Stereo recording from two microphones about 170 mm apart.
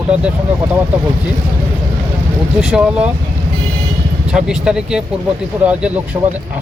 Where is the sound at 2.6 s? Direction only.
5° right (ahead or behind).